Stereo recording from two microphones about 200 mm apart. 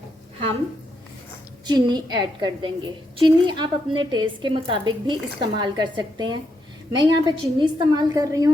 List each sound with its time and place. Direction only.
1.6 s a woman's voice: 20° right (ahead or behind)